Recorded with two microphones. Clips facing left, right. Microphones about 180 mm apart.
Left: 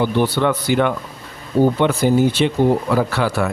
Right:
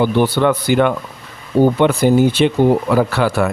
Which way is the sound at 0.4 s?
55° right (ahead or behind).